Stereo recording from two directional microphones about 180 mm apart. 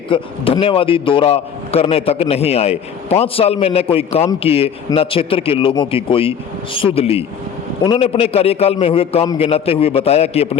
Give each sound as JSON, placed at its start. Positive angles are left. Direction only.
{"t": 0.1, "sound": "a man's voice", "side_deg": 30}